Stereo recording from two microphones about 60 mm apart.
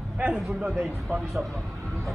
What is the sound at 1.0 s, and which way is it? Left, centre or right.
Speech, centre.